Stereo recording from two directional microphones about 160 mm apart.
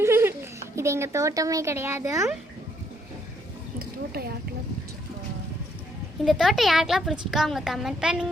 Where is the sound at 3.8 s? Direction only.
75° right (ahead or behind).